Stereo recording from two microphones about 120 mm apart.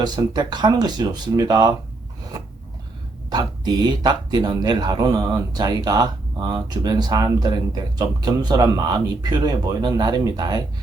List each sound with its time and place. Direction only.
0.0 s speech: 35° right (ahead or behind)
3.2 s speech: 35° right (ahead or behind)